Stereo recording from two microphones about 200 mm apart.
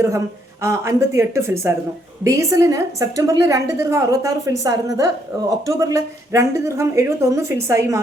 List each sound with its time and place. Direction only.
0.6 s a woman's voice: 15° right (ahead or behind)